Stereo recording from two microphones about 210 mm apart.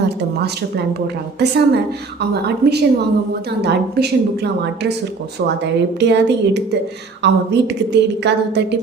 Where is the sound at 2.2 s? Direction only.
50° right (ahead or behind).